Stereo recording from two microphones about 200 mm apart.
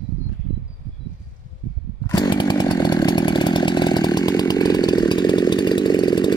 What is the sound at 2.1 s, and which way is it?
Chainsaw, 20° left (ahead or behind).